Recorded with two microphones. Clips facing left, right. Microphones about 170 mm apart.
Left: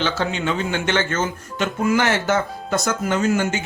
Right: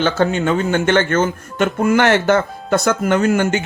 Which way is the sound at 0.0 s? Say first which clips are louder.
Right 6 dB; 50° right (ahead or behind).